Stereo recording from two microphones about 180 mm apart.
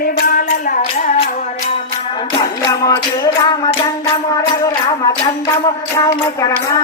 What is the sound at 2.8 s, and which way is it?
Music, 20° left (ahead or behind).